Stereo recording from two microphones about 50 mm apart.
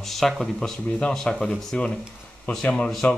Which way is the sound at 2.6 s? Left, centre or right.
Left.